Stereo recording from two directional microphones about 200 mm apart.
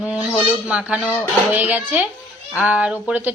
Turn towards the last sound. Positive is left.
turn(degrees=-5)  # may be behind; listen again after turning